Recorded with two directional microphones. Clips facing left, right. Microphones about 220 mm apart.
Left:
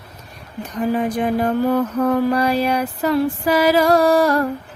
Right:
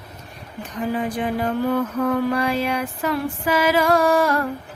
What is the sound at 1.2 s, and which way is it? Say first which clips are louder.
Music: left 4 dB; 45° left (ahead or behind).